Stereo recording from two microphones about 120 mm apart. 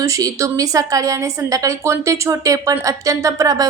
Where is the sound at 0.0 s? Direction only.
30° right (ahead or behind).